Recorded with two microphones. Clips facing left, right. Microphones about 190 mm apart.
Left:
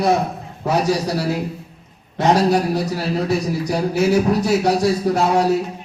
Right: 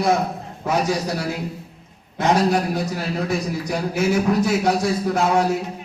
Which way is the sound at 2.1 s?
35° left (ahead or behind).